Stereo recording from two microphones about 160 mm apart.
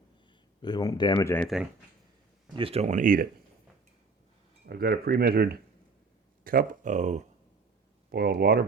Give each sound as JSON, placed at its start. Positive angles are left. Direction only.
{"t": 0.6, "sound": "speech", "side_deg": 25}
{"t": 2.5, "sound": "speech", "side_deg": -35}
{"t": 4.6, "sound": "speech", "side_deg": -70}
{"t": 8.1, "sound": "speech", "side_deg": -80}